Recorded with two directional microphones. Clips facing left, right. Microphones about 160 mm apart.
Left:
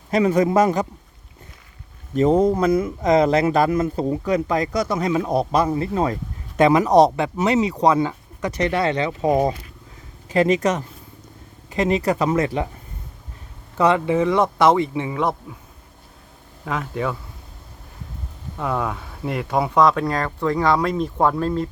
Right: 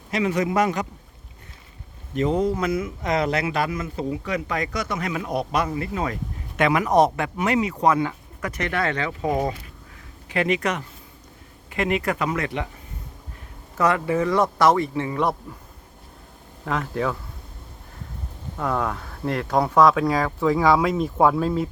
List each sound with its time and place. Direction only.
2.1 s speech: 40° left (ahead or behind); by 9.4 s 20° left (ahead or behind)
10.2 s speech: 35° left (ahead or behind)
13.8 s speech: 20° left (ahead or behind)
15.2 s speech: centre (ahead or behind)
16.6 s speech: centre (ahead or behind)
18.5 s speech: 5° left (ahead or behind)